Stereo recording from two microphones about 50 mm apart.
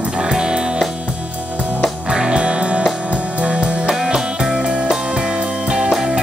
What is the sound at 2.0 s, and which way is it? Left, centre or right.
Music, centre.